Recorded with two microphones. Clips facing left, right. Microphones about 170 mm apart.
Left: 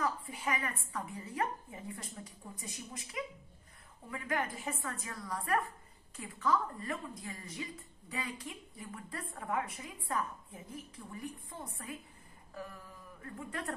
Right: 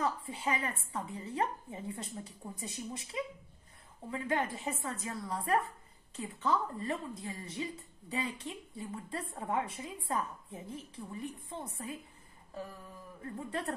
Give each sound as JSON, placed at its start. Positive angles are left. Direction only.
{"t": 0.0, "sound": "a woman's voice", "side_deg": -25}
{"t": 13.2, "sound": "a woman's voice", "side_deg": -30}